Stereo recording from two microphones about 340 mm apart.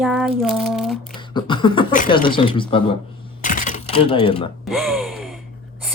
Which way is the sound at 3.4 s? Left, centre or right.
Left.